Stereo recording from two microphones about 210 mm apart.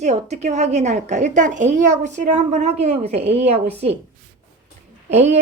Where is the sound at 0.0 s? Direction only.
30° right (ahead or behind).